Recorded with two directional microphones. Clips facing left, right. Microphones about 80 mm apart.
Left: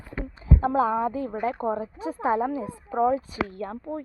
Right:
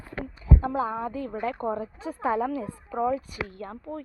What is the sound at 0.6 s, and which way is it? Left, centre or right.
Speech, left.